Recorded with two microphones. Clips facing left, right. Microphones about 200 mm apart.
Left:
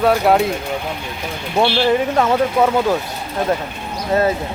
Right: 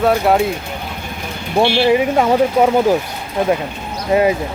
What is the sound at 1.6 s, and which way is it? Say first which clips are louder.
Speech: right 3 dB; 10° right (ahead or behind).